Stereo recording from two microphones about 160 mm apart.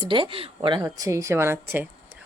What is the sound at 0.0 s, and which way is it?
Speech, 30° right (ahead or behind).